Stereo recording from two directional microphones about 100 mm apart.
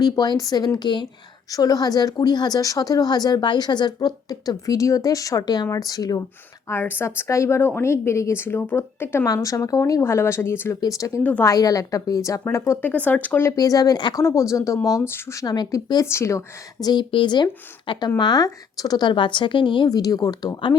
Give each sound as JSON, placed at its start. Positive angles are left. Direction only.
{"t": 0.0, "sound": "a woman's voice", "side_deg": 40}
{"t": 1.5, "sound": "speech", "side_deg": 40}
{"t": 6.7, "sound": "a woman's voice", "side_deg": 20}
{"t": 9.2, "sound": "a woman's voice", "side_deg": 35}
{"t": 10.8, "sound": "speech", "side_deg": 35}
{"t": 11.2, "sound": "speech", "side_deg": 15}
{"t": 11.4, "sound": "speech", "side_deg": 35}
{"t": 12.8, "sound": "speech", "side_deg": 15}
{"t": 13.6, "sound": "speech", "side_deg": 35}
{"t": 14.3, "sound": "speech", "side_deg": 30}
{"t": 15.4, "sound": "a woman's voice", "side_deg": 45}
{"t": 16.0, "sound": "a woman's voice", "side_deg": 30}
{"t": 16.8, "sound": "a woman's voice", "side_deg": 50}
{"t": 19.9, "sound": "speech", "side_deg": 40}